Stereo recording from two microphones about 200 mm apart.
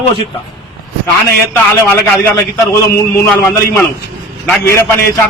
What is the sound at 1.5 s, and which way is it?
A man's voice, 10° left (ahead or behind).